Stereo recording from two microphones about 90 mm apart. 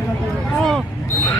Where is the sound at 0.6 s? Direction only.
5° left (ahead or behind).